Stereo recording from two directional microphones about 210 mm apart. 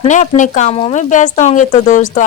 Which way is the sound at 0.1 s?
35° left (ahead or behind).